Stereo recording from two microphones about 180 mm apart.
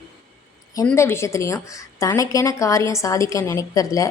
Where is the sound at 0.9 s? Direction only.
15° left (ahead or behind).